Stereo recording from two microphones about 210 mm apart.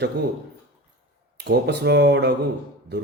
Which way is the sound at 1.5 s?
55° right (ahead or behind).